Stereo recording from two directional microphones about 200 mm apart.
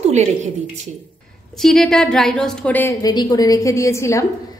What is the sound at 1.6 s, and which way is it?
A woman's voice, 5° left (ahead or behind).